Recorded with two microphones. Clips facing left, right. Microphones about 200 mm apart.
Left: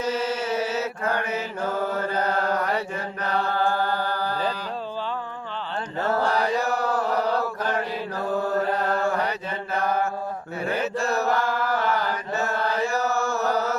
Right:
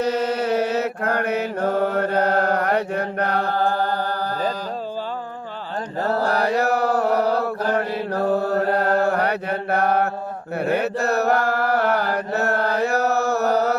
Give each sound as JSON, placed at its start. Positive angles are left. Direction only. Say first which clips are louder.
{"t": 0.0, "sound": "mantra", "louder": "right 5 dB", "side_deg": -65}
{"t": 3.5, "sound": "music", "louder": "right 3 dB", "side_deg": -40}
{"t": 6.0, "sound": "mantra", "louder": "right 2 dB", "side_deg": -35}
{"t": 6.3, "sound": "mantra", "louder": "right 4 dB", "side_deg": -65}
{"t": 7.2, "sound": "mantra", "louder": "right 4 dB", "side_deg": -35}
{"t": 7.8, "sound": "mantra", "louder": "right 6 dB", "side_deg": -60}
{"t": 8.5, "sound": "chant", "louder": "right 4 dB", "side_deg": -65}
{"t": 9.0, "sound": "mantra", "louder": "right 5 dB", "side_deg": -60}
{"t": 10.6, "sound": "chant", "louder": "right 5 dB", "side_deg": -65}